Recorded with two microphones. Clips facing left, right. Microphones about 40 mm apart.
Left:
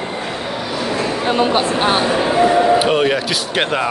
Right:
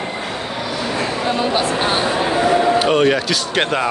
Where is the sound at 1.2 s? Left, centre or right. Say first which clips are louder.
Left 3 dB; left.